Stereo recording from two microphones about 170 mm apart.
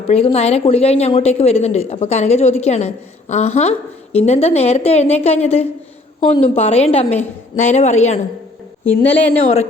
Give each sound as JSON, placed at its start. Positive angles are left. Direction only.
{"t": 0.1, "sound": "a woman's voice", "side_deg": 35}
{"t": 8.8, "sound": "a woman's voice", "side_deg": 10}